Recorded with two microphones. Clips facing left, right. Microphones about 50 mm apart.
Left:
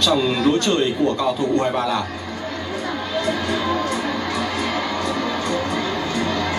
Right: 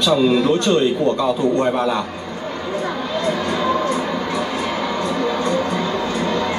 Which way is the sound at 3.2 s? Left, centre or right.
Right.